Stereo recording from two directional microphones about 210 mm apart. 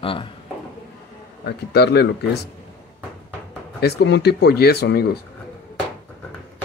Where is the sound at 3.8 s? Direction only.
50° left (ahead or behind).